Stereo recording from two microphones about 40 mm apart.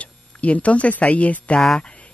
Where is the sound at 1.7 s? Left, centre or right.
Left.